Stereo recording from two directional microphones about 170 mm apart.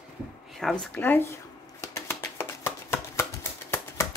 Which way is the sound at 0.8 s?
10° left (ahead or behind).